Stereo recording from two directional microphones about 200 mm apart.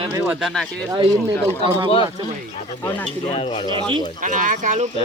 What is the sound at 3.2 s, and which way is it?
Speech, 30° left (ahead or behind).